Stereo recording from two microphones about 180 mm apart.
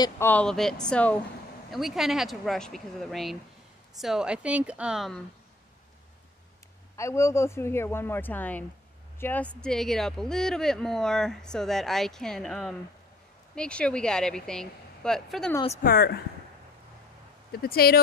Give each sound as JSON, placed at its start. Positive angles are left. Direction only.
{"t": 0.0, "sound": "speech", "side_deg": 10}
{"t": 7.0, "sound": "speech", "side_deg": 15}
{"t": 15.8, "sound": "speech", "side_deg": 55}
{"t": 17.5, "sound": "speech", "side_deg": 55}